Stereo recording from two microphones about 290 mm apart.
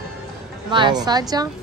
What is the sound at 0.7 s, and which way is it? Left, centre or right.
Speech, centre.